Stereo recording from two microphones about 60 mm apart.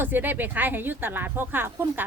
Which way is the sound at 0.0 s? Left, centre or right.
Right.